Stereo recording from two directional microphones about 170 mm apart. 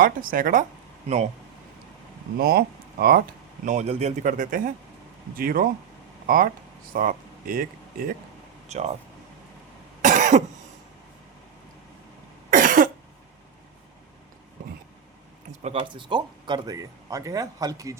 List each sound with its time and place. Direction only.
0.0 s speech: 55° right (ahead or behind)
2.4 s speech: 65° right (ahead or behind)
3.7 s speech: 40° right (ahead or behind)
8.7 s speech: 40° right (ahead or behind)
10.0 s cough: 50° right (ahead or behind)
12.5 s cough: 50° right (ahead or behind)
15.6 s speech: 30° right (ahead or behind)